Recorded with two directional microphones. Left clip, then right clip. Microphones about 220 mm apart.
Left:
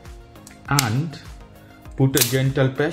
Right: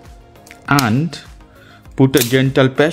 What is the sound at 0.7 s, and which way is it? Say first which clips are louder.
Speech: right 7 dB; 55° right (ahead or behind).